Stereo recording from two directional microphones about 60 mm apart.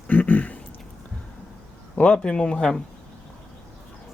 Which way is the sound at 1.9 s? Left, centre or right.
Centre.